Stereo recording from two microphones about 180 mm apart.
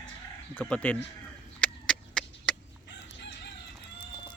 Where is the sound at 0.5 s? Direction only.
5° left (ahead or behind).